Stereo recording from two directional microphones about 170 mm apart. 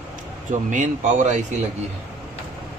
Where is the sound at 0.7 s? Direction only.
50° right (ahead or behind).